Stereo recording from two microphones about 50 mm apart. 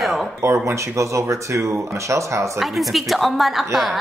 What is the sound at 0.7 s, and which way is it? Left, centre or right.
Speech, right.